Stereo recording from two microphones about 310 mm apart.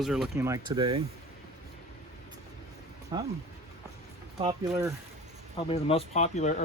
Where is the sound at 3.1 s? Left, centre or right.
Centre.